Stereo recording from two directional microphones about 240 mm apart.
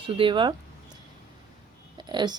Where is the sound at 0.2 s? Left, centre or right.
Right.